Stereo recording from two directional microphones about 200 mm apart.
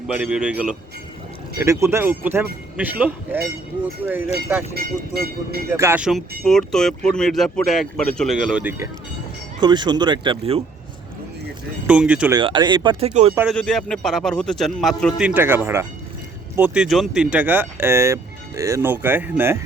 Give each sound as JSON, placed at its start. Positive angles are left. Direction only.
{"t": 0.2, "sound": "speech", "side_deg": -5}
{"t": 4.7, "sound": "speech", "side_deg": -50}
{"t": 5.7, "sound": "speech", "side_deg": -10}
{"t": 9.6, "sound": "speech", "side_deg": -20}
{"t": 11.9, "sound": "speech", "side_deg": -5}
{"t": 12.3, "sound": "speech", "side_deg": -20}
{"t": 13.5, "sound": "speech", "side_deg": 0}